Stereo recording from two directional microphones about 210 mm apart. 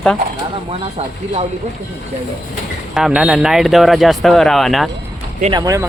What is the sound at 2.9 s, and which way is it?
Speech, 5° right (ahead or behind).